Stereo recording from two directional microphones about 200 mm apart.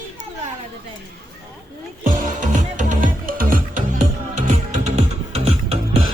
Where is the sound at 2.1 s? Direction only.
40° right (ahead or behind).